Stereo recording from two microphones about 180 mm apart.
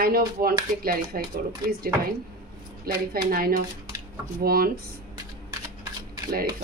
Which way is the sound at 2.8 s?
55° right (ahead or behind).